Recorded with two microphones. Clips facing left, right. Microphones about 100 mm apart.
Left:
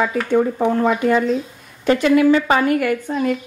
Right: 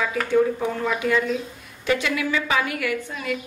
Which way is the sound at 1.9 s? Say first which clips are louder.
Left 10 dB; 45° left (ahead or behind).